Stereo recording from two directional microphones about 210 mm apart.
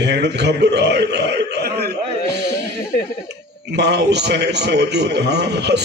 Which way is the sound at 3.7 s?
55° right (ahead or behind).